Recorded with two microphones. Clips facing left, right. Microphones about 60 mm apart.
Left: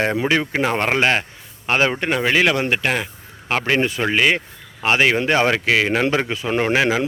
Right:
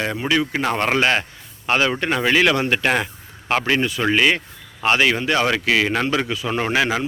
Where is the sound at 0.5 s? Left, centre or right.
Centre.